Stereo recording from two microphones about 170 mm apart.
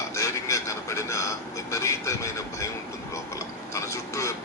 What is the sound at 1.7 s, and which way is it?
Vehicle, 20° left (ahead or behind).